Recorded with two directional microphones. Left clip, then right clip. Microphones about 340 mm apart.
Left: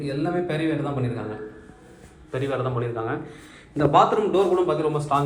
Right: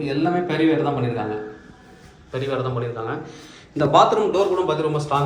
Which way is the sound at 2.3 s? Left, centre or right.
Centre.